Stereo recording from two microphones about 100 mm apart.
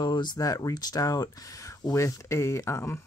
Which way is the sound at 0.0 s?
50° left (ahead or behind).